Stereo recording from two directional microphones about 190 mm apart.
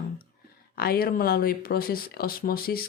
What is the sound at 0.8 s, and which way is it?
Speech, 50° left (ahead or behind).